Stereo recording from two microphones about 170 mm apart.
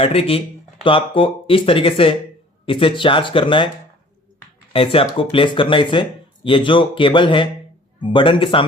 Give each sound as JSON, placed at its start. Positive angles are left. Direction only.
{"t": 0.0, "sound": "speech", "side_deg": 35}
{"t": 4.7, "sound": "speech", "side_deg": 35}